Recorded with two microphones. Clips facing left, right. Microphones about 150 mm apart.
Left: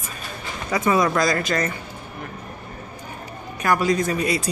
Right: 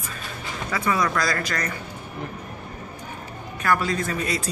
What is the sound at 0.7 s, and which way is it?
Speech, 20° left (ahead or behind).